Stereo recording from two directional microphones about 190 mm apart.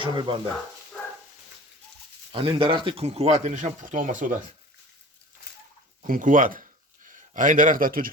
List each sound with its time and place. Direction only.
0.0 s speech: 25° right (ahead or behind)
2.3 s speech: 30° right (ahead or behind); by 4.4 s 45° right (ahead or behind)
6.0 s speech: 45° right (ahead or behind)